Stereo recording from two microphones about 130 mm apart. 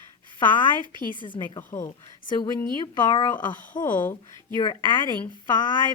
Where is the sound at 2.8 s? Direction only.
35° left (ahead or behind).